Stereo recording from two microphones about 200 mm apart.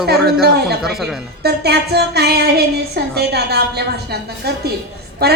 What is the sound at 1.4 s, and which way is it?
A woman's voice, 55° right (ahead or behind).